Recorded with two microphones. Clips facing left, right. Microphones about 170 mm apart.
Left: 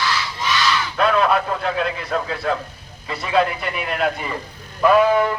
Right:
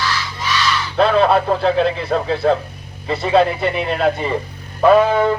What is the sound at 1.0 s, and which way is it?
Speech, 30° right (ahead or behind).